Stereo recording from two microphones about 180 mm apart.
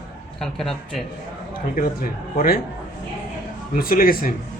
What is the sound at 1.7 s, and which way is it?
Speech, 50° left (ahead or behind).